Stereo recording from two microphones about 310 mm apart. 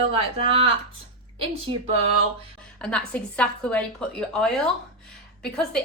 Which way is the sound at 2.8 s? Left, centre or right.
Centre.